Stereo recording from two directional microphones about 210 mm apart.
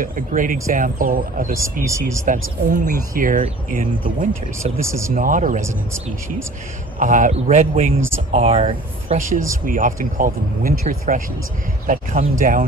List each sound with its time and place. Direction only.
0.0 s speech: 40° right (ahead or behind)
1.9 s speech: 15° right (ahead or behind)
2.2 s speech: 40° right (ahead or behind)
4.8 s speech: 15° right (ahead or behind)
5.1 s speech: 40° right (ahead or behind)
7.0 s speech: 40° right (ahead or behind)